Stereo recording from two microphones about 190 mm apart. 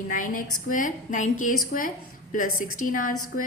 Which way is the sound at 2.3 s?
45° left (ahead or behind).